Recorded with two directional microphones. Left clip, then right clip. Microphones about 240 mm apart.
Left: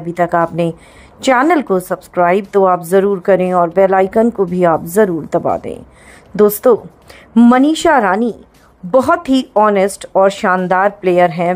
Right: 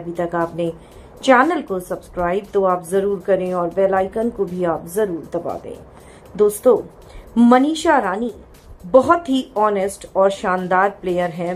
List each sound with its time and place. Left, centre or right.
0.1 s a woman's voice: left